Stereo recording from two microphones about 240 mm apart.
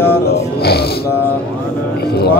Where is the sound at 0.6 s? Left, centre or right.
Left.